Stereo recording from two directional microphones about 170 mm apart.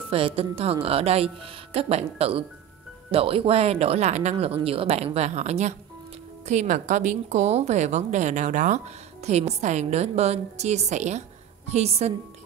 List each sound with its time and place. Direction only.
0.1 s speech: 35° right (ahead or behind)